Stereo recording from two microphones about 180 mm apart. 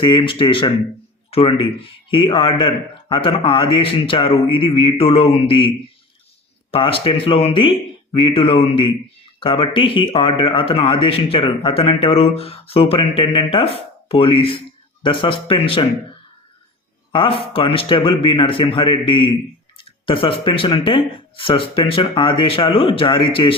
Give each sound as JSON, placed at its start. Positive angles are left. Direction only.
{"t": 0.0, "sound": "a man's voice", "side_deg": 25}
{"t": 17.1, "sound": "a man's voice", "side_deg": 30}